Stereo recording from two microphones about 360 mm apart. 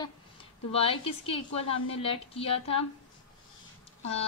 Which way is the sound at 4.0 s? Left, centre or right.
Centre.